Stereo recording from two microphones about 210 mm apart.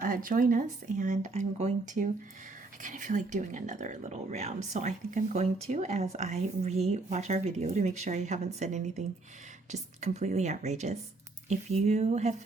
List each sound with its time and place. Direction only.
0.0 s speech: 40° right (ahead or behind)